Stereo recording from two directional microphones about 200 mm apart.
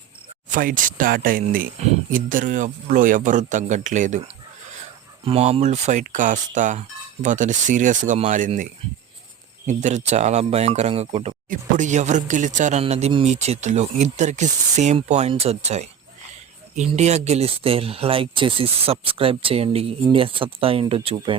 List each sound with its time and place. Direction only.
0.5 s speech: 40° right (ahead or behind)
5.2 s speech: 30° right (ahead or behind)
9.6 s speech: 35° right (ahead or behind)